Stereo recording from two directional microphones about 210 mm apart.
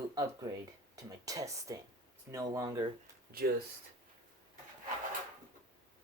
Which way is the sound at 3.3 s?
45° right (ahead or behind).